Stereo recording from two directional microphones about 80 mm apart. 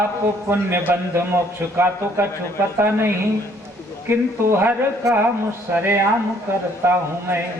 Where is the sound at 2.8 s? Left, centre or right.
Right.